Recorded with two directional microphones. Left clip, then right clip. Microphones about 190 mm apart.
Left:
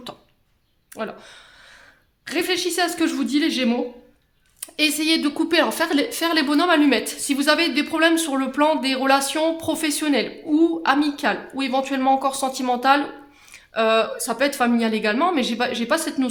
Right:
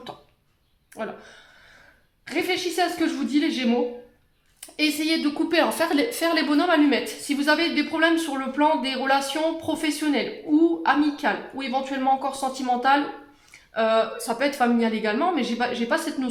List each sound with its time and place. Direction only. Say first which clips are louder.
0.9 s a woman's voice: left 2 dB; 40° left (ahead or behind)